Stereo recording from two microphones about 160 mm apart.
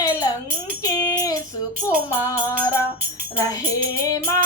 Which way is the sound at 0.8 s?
20° left (ahead or behind).